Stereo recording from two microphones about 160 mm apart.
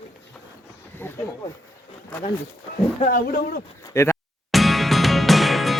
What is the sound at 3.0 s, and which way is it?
Speech, 65° left (ahead or behind).